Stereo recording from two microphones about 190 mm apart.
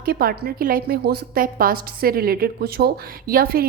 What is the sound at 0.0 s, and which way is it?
A woman's voice, 50° right (ahead or behind).